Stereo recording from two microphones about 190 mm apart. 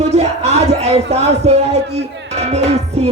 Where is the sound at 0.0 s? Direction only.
35° right (ahead or behind).